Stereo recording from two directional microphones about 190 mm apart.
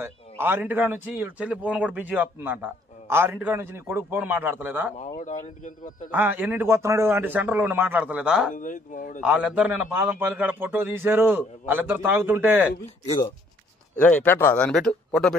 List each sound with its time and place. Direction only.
0.0 s a man's voice: 10° right (ahead or behind)
4.9 s speech: 40° left (ahead or behind)
6.1 s a man's voice: 10° right (ahead or behind)
8.5 s speech: 45° left (ahead or behind)
9.2 s a man's voice: 5° right (ahead or behind)
13.9 s speech: 10° left (ahead or behind)